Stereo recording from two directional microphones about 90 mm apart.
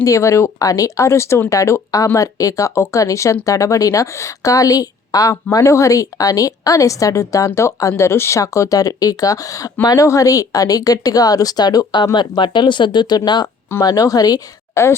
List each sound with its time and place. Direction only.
0.0 s a woman's voice: 35° left (ahead or behind); by 13.5 s 50° left (ahead or behind)
13.8 s speech: 40° left (ahead or behind)
14.8 s a woman's voice: 30° left (ahead or behind)